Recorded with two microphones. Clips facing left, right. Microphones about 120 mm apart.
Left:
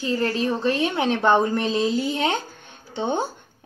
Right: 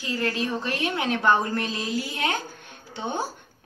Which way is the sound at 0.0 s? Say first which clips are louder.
Left 4 dB; 30° left (ahead or behind).